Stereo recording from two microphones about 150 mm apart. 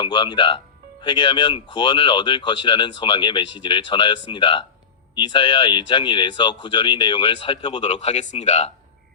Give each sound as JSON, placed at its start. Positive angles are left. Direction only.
{"t": 0.0, "sound": "speech", "side_deg": 30}